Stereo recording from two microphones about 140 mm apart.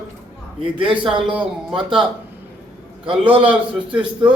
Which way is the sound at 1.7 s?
5° right (ahead or behind).